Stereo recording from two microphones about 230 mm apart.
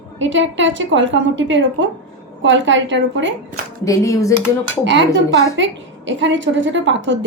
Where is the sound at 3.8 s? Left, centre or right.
Centre.